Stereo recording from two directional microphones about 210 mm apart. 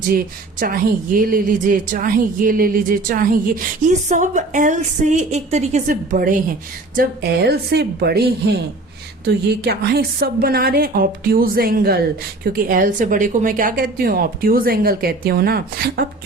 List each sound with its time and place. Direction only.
0.6 s a woman's voice: 40° right (ahead or behind)